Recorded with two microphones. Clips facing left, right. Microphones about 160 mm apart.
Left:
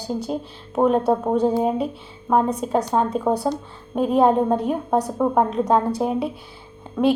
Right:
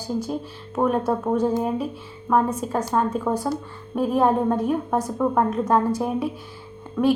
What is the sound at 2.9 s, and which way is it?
A woman's voice, 20° left (ahead or behind).